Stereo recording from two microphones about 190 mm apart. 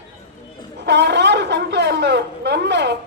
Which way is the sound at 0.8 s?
65° right (ahead or behind).